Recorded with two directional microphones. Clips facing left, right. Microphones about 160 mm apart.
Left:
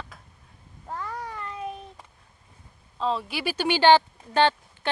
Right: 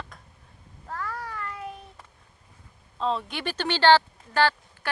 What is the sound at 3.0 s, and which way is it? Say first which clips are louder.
Speech: left 1 dB; centre (ahead or behind).